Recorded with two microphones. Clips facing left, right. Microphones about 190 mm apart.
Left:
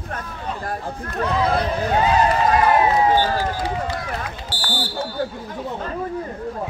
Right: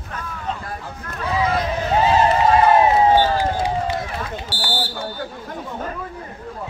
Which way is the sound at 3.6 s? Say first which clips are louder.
Right 3 dB; 25° right (ahead or behind).